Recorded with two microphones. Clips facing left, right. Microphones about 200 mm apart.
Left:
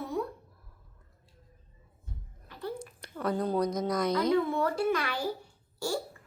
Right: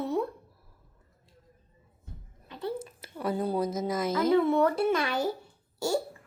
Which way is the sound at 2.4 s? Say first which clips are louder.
Right 3 dB; 25° right (ahead or behind).